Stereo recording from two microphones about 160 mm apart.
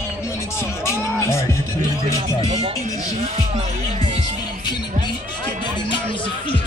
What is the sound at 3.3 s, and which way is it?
Music, 40° right (ahead or behind).